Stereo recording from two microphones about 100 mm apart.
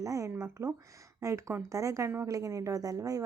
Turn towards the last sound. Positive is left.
turn(degrees=-35)  # may be behind; listen again after turning